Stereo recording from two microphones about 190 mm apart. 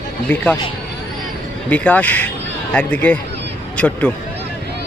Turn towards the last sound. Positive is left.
turn(degrees=10)  # may be behind; listen again after turning